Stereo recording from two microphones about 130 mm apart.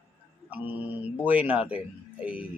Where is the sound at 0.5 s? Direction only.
15° right (ahead or behind).